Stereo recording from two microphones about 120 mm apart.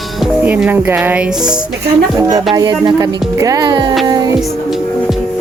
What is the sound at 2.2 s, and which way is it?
Speech, 30° right (ahead or behind).